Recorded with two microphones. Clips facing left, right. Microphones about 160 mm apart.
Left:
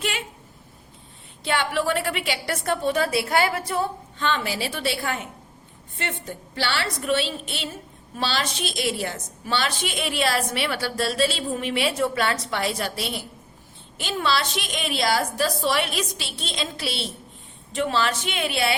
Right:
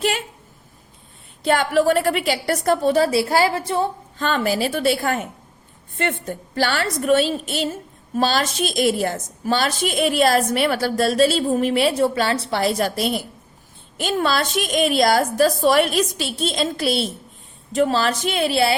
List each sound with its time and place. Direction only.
1.5 s a woman's voice: 45° right (ahead or behind); by 3.8 s 25° right (ahead or behind)
4.2 s a woman's voice: 45° right (ahead or behind)